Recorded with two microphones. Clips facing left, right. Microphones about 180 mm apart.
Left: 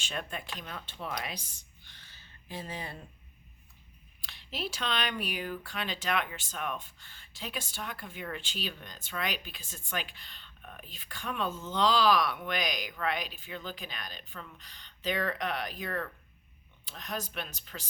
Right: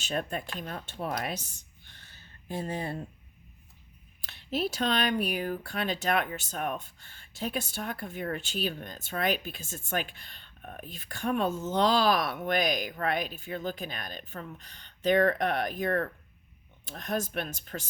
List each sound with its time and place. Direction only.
0.0 s speech: 45° right (ahead or behind)
2.5 s speech: 50° right (ahead or behind)
4.5 s speech: 45° right (ahead or behind)